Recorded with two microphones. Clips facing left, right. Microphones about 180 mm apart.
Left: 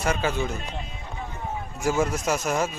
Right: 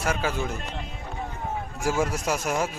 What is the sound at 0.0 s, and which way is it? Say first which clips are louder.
Speech: left 2 dB; 5° right (ahead or behind).